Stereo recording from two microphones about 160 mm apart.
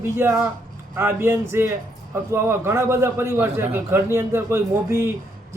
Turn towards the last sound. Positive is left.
turn(degrees=-15)  # may be behind; listen again after turning